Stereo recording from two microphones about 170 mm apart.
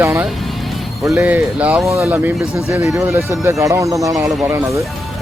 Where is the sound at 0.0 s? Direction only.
15° right (ahead or behind).